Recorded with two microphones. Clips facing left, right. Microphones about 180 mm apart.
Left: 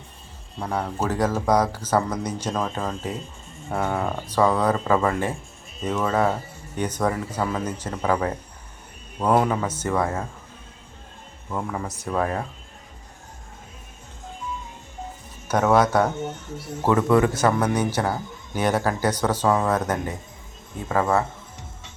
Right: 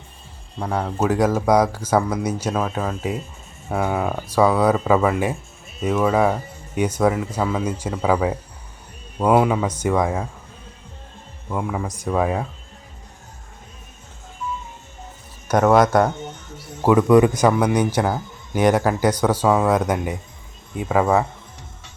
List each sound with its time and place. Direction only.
0.6 s speech: centre (ahead or behind)
11.5 s speech: 5° right (ahead or behind)
15.4 s speech: 10° right (ahead or behind)
16.0 s speech: 10° left (ahead or behind)
17.1 s speech: 15° right (ahead or behind)